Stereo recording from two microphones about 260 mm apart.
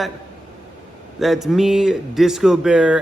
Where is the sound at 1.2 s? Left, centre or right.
Centre.